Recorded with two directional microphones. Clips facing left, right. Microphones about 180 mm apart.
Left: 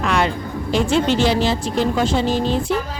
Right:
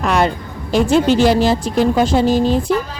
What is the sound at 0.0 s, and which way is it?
Music, 40° right (ahead or behind).